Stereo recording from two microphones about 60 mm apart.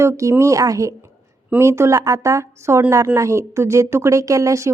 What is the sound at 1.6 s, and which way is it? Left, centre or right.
A woman's voice, right.